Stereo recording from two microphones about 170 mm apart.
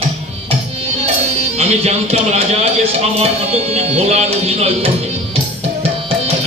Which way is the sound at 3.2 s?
35° right (ahead or behind).